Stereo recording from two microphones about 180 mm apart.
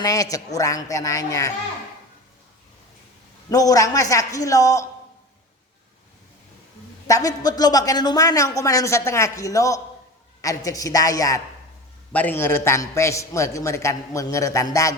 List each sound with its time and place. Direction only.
0.0 s speech: 20° left (ahead or behind)
3.5 s speech: 20° left (ahead or behind)
7.1 s a man's voice: 20° left (ahead or behind)